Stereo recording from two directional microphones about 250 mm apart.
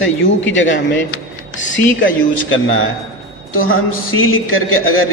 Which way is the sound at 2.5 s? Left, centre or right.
Left.